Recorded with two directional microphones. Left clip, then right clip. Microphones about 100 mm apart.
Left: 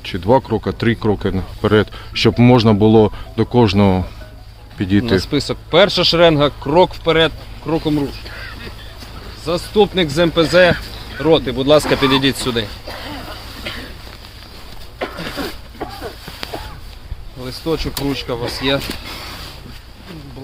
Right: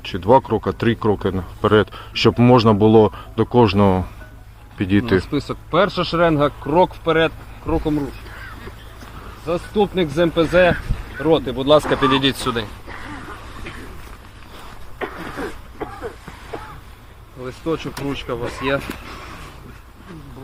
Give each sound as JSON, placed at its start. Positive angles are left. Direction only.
{"t": 0.0, "sound": "speech", "side_deg": 25}
{"t": 4.8, "sound": "speech", "side_deg": 25}
{"t": 5.1, "sound": "speech", "side_deg": 40}
{"t": 9.5, "sound": "speech", "side_deg": 40}
{"t": 11.8, "sound": "speech", "side_deg": 15}
{"t": 12.2, "sound": "speech", "side_deg": 0}
{"t": 14.9, "sound": "a sound", "side_deg": 35}
{"t": 17.4, "sound": "speech", "side_deg": 35}